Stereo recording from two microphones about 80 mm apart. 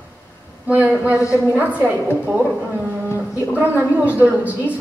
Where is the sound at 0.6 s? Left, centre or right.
Right.